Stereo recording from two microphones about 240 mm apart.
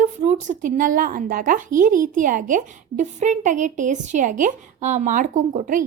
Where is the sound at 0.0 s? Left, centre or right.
Right.